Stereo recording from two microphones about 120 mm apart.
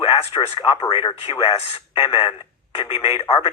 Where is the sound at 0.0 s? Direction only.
55° left (ahead or behind).